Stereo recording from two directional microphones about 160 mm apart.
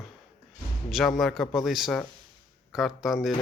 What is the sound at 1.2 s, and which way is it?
Speech, centre (ahead or behind).